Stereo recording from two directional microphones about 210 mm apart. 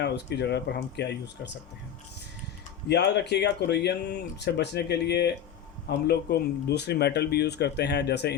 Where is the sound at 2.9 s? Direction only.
55° left (ahead or behind).